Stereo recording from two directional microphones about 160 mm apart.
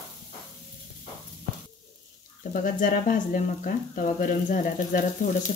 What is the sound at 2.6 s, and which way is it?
Speech, 55° left (ahead or behind).